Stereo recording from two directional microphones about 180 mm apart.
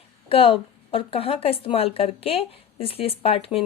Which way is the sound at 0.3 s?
30° left (ahead or behind).